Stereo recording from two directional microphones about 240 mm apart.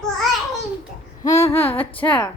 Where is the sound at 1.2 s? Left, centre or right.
Centre.